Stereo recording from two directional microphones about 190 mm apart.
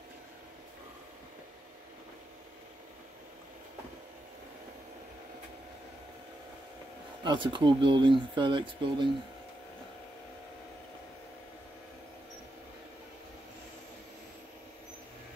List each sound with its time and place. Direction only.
7.2 s speech: 25° right (ahead or behind)